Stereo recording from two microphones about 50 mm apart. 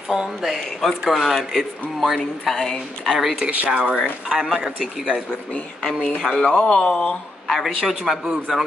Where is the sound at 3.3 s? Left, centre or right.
Right.